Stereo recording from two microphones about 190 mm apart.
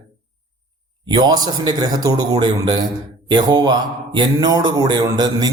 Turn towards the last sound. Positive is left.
turn(degrees=-20)  # may be behind; listen again after turning